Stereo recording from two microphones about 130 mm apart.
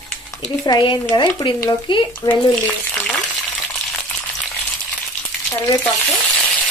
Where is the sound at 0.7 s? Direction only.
35° left (ahead or behind).